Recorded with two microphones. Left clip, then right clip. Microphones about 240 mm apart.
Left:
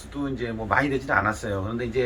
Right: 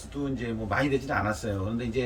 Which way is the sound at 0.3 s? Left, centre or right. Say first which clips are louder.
Left 6 dB; centre.